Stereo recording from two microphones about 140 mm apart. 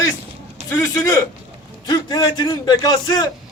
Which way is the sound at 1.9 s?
30° left (ahead or behind).